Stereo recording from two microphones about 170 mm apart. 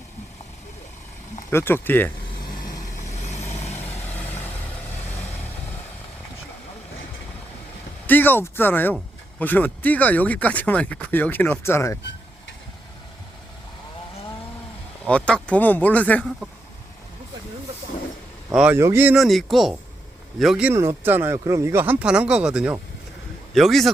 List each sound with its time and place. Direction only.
1.5 s speech: 10° left (ahead or behind)
3.0 s vehicle: 40° left (ahead or behind)
8.0 s speech: 10° left (ahead or behind)
15.0 s speech: 5° left (ahead or behind)
18.5 s speech: 10° right (ahead or behind)
19.1 s speech: centre (ahead or behind)